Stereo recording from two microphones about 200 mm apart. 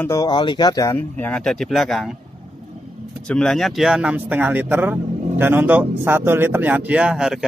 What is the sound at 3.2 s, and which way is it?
Speech, 5° left (ahead or behind).